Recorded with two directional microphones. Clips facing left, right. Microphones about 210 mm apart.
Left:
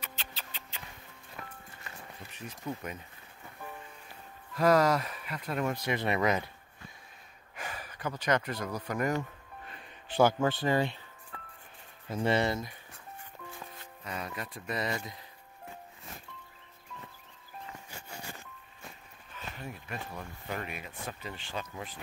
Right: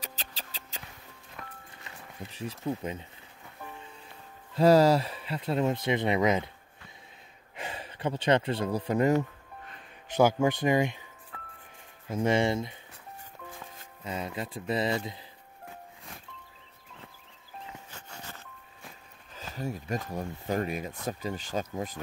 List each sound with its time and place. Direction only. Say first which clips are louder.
0.0 s music: right 2 dB; 35° right (ahead or behind)
1.4 s music: even; 5° left (ahead or behind)
2.3 s speech: right 6 dB; 30° right (ahead or behind)
4.6 s speech: right 5 dB; 30° right (ahead or behind)
7.5 s speech: right 3 dB; 25° right (ahead or behind)
10.1 s speech: right 2 dB; 10° right (ahead or behind)
12.1 s speech: right 3 dB; 10° right (ahead or behind)
14.0 s speech: right 4 dB; 25° right (ahead or behind)
17.9 s music: left 1 dB; 10° left (ahead or behind)
19.3 s speech: right 7 dB; 35° right (ahead or behind)